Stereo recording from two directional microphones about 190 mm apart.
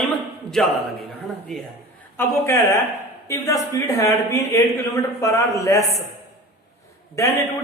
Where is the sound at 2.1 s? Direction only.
15° left (ahead or behind).